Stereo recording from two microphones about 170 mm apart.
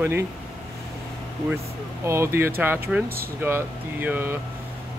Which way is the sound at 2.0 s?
15° right (ahead or behind).